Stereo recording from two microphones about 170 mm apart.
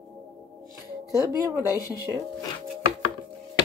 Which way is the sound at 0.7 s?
15° right (ahead or behind).